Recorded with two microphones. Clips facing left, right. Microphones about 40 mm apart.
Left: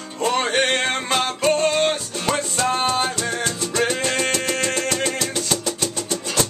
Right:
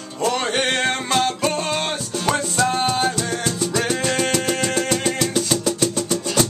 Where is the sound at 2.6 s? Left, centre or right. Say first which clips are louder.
Right 1 dB; centre.